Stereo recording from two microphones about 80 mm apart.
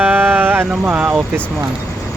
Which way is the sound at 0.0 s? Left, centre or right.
Right.